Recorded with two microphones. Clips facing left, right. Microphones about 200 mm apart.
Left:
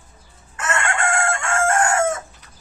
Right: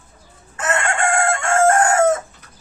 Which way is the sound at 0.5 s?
35° right (ahead or behind).